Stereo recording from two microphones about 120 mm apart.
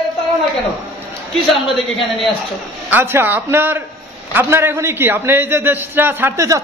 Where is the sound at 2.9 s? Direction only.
20° right (ahead or behind).